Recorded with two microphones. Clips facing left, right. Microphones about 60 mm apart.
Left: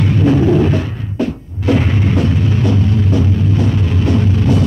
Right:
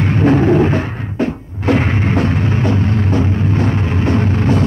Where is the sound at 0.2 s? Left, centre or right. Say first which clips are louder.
Right 1 dB; right.